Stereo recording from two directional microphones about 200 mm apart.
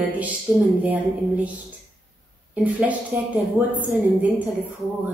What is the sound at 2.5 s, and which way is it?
Speech, 5° right (ahead or behind).